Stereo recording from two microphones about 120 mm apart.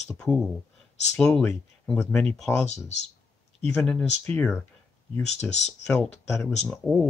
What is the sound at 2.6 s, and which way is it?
Speech, 70° left (ahead or behind).